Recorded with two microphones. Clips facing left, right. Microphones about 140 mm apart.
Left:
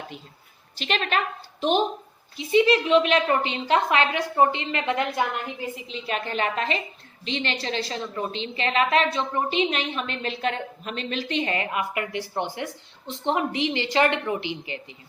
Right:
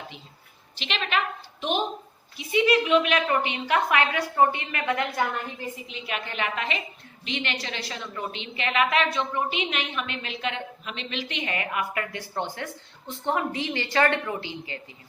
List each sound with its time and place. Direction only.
0.8 s a woman's voice: 40° left (ahead or behind)
2.4 s a woman's voice: 30° left (ahead or behind)
5.9 s a woman's voice: 35° left (ahead or behind); by 14.8 s 20° left (ahead or behind)